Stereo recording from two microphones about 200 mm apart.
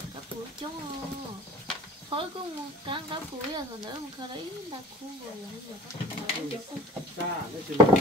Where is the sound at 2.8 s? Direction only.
25° right (ahead or behind).